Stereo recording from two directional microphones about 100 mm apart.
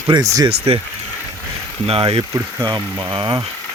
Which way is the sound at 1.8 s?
75° right (ahead or behind).